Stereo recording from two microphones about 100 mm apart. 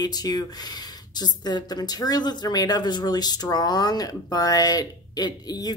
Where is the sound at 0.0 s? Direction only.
45° left (ahead or behind).